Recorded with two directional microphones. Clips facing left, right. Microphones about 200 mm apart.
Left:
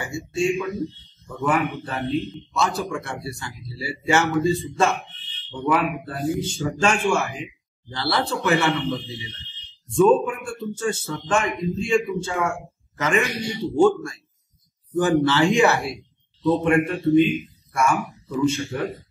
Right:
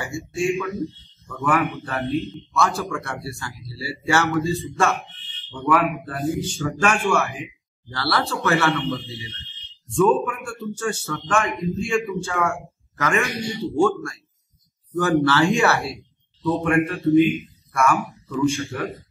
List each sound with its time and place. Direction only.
0.0 s a man's voice: 25° left (ahead or behind)